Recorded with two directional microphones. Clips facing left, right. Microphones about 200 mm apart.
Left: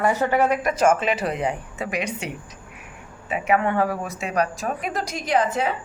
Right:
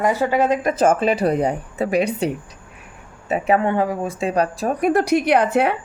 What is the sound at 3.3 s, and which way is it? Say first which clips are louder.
A woman's voice: right 3 dB; 35° right (ahead or behind).